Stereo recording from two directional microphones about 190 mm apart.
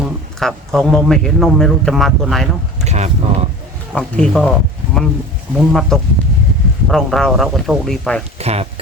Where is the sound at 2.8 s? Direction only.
35° right (ahead or behind).